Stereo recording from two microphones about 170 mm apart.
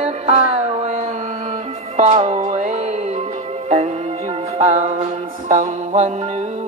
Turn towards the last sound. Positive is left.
turn(degrees=-40)  # may be behind; listen again after turning